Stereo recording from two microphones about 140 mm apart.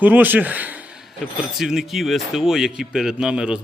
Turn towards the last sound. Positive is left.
turn(degrees=-5)  # may be behind; listen again after turning